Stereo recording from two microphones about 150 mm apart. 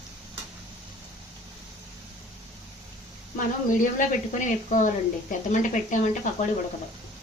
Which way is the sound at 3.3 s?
60° left (ahead or behind).